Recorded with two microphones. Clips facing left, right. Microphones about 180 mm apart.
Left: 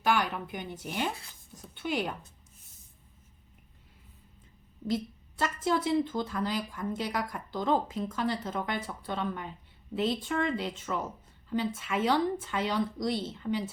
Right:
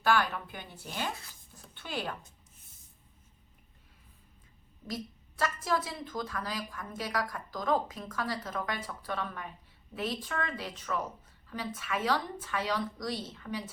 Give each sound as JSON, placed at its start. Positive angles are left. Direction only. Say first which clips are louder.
{"t": 0.0, "sound": "a woman's voice", "louder": "even", "side_deg": 15}
{"t": 5.4, "sound": "a woman's voice", "louder": "left 3 dB", "side_deg": 25}